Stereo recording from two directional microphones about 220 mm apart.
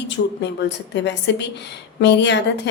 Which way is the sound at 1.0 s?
55° left (ahead or behind).